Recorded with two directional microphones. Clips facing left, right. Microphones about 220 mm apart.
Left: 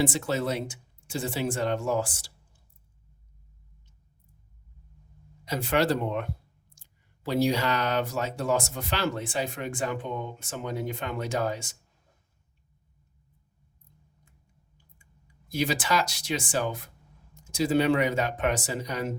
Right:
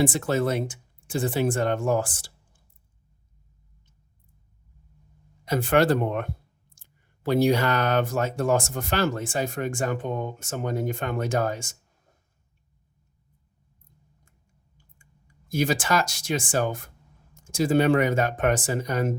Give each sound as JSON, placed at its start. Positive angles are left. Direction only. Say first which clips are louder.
{"t": 0.0, "sound": "speech", "louder": "right 4 dB", "side_deg": -50}
{"t": 5.5, "sound": "speech", "louder": "right 4 dB", "side_deg": -50}
{"t": 15.4, "sound": "speech", "louder": "right 3 dB", "side_deg": -45}